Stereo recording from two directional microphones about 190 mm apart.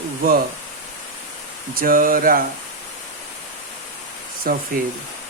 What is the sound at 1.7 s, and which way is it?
Speech, 50° right (ahead or behind).